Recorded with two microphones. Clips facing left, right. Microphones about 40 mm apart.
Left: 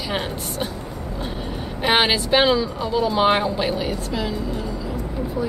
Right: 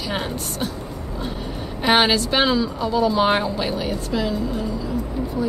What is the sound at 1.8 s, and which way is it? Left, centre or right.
A woman's voice, centre.